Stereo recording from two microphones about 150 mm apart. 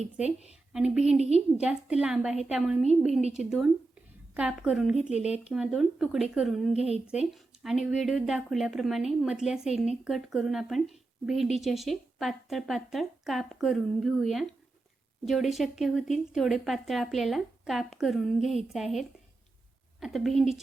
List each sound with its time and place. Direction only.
0.3 s a woman's voice: 45° left (ahead or behind)
0.7 s speech: 5° right (ahead or behind)